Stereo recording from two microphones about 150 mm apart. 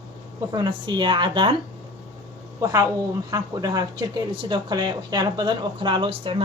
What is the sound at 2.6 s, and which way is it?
Speech, 25° right (ahead or behind).